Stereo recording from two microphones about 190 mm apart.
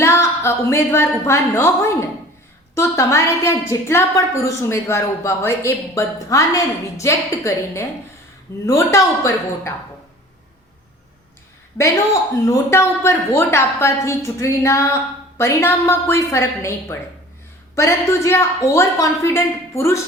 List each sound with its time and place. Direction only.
0.0 s a woman's voice: 15° left (ahead or behind)
12.5 s a woman's voice: 15° left (ahead or behind)